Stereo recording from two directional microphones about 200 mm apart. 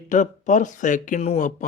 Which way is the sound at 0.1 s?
40° left (ahead or behind).